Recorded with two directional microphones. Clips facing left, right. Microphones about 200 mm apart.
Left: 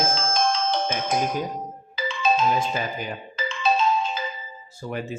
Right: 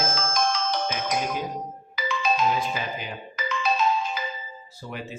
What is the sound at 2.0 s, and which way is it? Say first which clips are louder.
Marimba: left 3 dB; 30° left (ahead or behind).